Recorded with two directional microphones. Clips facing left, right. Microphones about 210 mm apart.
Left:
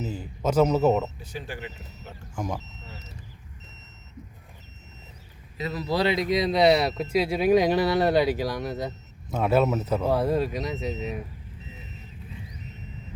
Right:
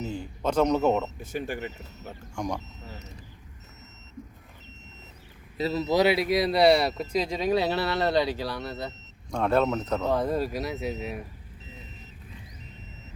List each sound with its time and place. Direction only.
0.0 s speech: 5° left (ahead or behind)
1.2 s speech: 50° right (ahead or behind)
2.3 s speech: 5° left (ahead or behind)
5.5 s speech: 30° right (ahead or behind)
6.0 s speech: 10° right (ahead or behind)